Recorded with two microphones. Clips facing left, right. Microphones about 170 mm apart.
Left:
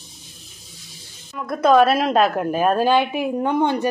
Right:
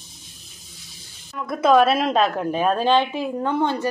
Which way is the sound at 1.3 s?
Centre (ahead or behind).